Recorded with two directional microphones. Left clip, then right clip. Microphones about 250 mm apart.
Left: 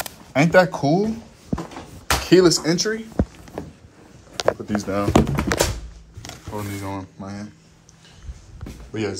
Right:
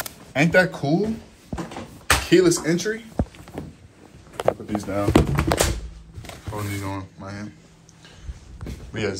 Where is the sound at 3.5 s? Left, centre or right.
Left.